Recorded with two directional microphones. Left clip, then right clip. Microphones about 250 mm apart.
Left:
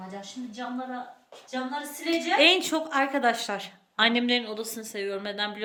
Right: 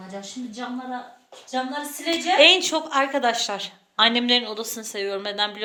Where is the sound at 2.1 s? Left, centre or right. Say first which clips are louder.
Right 5 dB; centre.